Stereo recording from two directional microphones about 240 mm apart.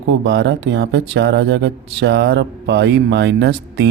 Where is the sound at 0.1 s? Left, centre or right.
Right.